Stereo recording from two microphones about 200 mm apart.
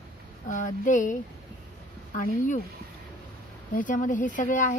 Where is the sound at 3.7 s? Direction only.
40° left (ahead or behind).